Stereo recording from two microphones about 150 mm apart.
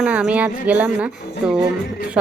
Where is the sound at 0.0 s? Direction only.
5° right (ahead or behind).